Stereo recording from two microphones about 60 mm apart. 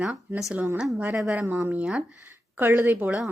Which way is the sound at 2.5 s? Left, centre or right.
Right.